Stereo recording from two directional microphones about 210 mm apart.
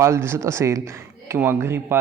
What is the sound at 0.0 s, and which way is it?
Speech, 15° right (ahead or behind).